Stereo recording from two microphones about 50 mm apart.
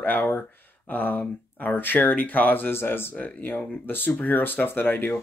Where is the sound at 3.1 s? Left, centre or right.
Left.